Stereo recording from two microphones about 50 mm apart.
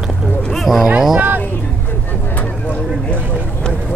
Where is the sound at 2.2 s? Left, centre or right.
Left.